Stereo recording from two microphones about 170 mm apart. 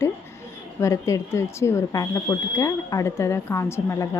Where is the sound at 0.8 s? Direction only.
20° left (ahead or behind).